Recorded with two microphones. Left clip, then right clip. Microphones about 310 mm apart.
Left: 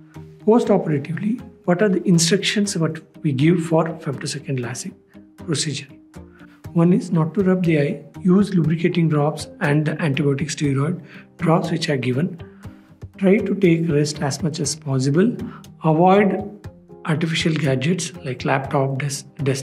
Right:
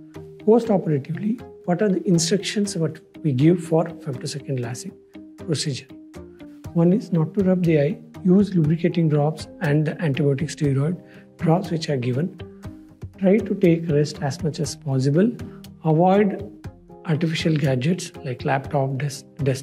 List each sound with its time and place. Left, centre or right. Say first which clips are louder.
0.5 s speech: left 2 dB; right